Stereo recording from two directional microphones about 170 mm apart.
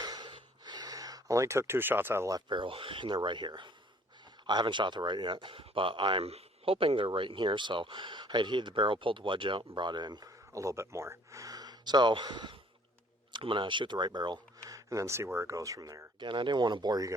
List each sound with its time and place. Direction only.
0.0 s speech: 25° right (ahead or behind)